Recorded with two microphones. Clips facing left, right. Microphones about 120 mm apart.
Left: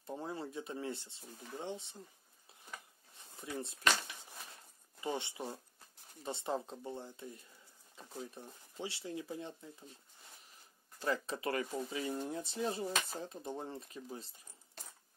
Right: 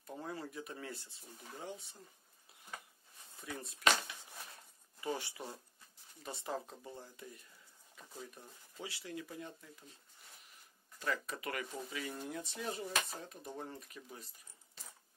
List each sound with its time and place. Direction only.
0.0 s speech: 25° left (ahead or behind)
3.3 s speech: 25° left (ahead or behind)
5.0 s speech: 25° left (ahead or behind)
8.0 s a sound: 30° left (ahead or behind)
8.4 s speech: 25° left (ahead or behind)
11.0 s speech: 30° left (ahead or behind)